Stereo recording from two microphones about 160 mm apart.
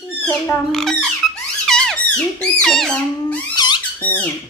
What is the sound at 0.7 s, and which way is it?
Speech, 5° left (ahead or behind).